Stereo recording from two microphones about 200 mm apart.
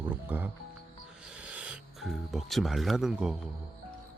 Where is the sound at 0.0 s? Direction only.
10° right (ahead or behind).